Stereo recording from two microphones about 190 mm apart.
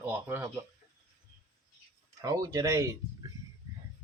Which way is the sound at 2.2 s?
20° right (ahead or behind).